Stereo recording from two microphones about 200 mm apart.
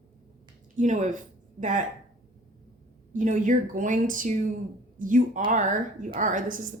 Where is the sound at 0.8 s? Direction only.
40° right (ahead or behind).